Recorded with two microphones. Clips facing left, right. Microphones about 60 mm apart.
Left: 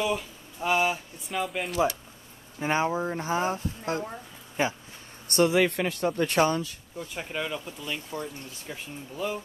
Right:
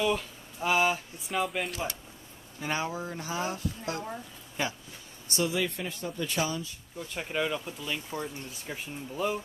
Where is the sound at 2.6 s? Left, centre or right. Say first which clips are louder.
Left 6 dB; left.